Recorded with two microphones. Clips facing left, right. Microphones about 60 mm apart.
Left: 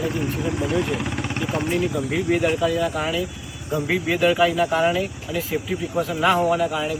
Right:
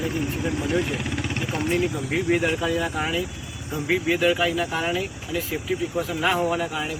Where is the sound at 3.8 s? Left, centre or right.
Centre.